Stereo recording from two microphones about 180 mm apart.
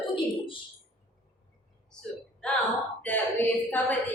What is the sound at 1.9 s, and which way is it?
A woman's voice, 5° left (ahead or behind).